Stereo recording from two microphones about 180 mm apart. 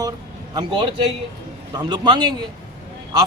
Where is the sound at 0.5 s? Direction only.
30° right (ahead or behind).